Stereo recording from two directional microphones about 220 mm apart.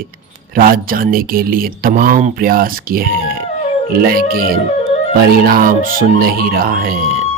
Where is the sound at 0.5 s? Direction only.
40° right (ahead or behind).